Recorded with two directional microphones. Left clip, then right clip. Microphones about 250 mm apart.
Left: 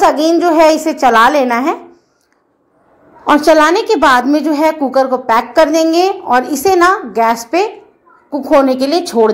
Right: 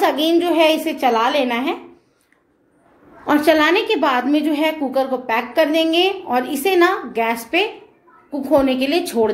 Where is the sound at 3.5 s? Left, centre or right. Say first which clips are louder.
Left 5 dB; left.